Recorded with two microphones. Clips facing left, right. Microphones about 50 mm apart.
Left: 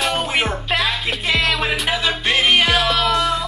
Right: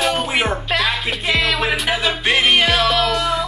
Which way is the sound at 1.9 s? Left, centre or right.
Centre.